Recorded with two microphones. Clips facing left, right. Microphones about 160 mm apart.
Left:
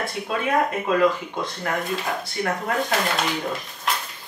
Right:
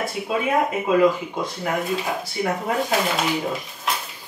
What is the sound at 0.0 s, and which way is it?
Speech, 5° right (ahead or behind).